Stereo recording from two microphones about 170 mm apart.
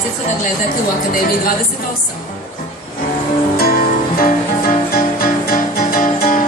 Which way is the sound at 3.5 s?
60° left (ahead or behind).